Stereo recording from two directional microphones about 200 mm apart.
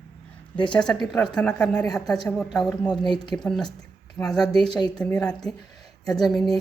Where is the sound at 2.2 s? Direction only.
5° left (ahead or behind).